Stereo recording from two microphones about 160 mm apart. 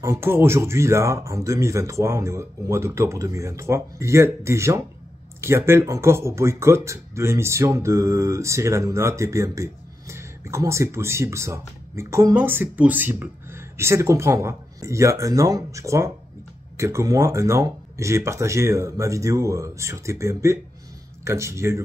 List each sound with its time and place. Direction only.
0.0 s speech: 15° right (ahead or behind)